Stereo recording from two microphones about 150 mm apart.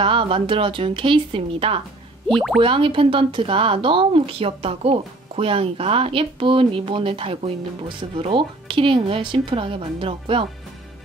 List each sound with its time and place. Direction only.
0.0 s speech: 35° right (ahead or behind)
2.3 s speech: centre (ahead or behind)
2.6 s speech: 35° right (ahead or behind)